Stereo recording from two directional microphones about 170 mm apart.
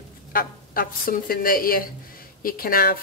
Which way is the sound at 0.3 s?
55° left (ahead or behind).